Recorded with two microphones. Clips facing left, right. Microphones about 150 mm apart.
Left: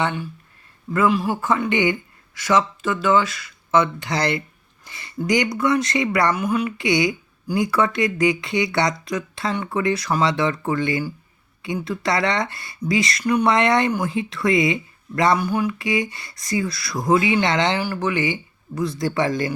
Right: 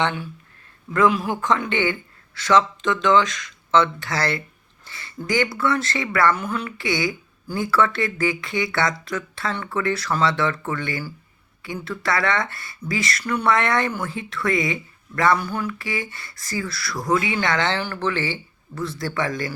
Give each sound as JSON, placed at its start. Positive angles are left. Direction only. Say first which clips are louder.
{"t": 0.0, "sound": "speech", "louder": "even", "side_deg": 0}